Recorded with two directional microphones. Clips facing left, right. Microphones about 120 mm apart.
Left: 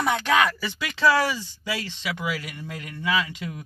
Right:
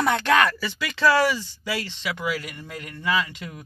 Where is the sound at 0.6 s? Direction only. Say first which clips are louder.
Right 1 dB; 20° left (ahead or behind).